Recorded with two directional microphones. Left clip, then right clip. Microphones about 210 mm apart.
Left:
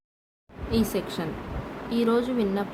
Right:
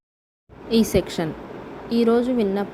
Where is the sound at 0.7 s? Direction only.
30° right (ahead or behind).